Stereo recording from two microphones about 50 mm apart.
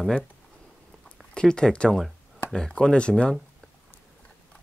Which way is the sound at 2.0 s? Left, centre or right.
Centre.